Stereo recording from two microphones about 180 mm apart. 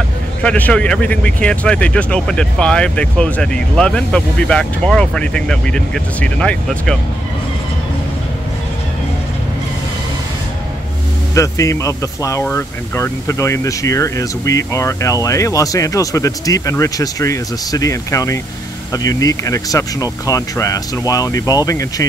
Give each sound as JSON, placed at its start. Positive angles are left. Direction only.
{"t": 0.4, "sound": "speech", "side_deg": 10}
{"t": 11.3, "sound": "speech", "side_deg": 15}